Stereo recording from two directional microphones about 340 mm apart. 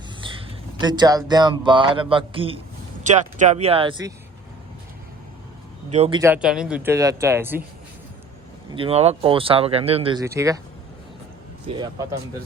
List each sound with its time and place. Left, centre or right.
0.2 s speech: centre
5.9 s speech: centre
8.7 s speech: centre
12.0 s speech: centre